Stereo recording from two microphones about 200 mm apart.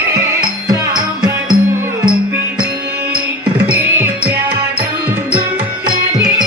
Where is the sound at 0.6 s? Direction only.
20° right (ahead or behind).